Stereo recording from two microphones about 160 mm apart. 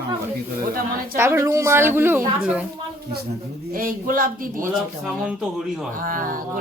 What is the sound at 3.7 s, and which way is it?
Speech, 60° right (ahead or behind).